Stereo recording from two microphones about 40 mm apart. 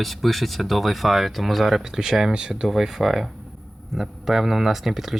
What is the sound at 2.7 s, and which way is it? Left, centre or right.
Speech, centre.